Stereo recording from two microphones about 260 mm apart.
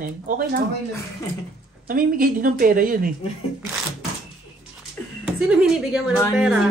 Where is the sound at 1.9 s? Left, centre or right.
Right.